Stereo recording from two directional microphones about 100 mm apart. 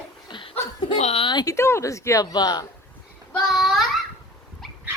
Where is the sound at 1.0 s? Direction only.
80° left.